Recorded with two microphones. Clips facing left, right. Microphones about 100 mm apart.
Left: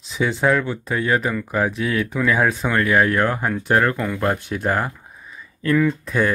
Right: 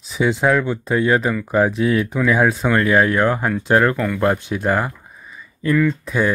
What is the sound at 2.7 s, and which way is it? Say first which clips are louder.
Speech: right 1 dB; 25° right (ahead or behind).